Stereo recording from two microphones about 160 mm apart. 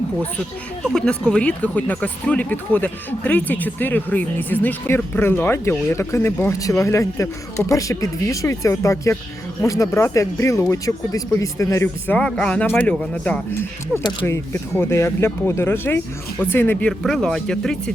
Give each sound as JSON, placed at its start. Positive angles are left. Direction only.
{"t": 0.9, "sound": "speech", "side_deg": 5}
{"t": 12.1, "sound": "speech", "side_deg": 5}